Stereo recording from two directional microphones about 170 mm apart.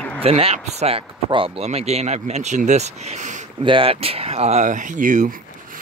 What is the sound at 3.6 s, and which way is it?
Speech, 30° right (ahead or behind).